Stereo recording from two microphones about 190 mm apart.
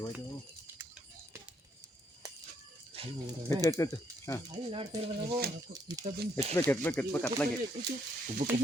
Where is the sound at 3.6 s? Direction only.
15° left (ahead or behind).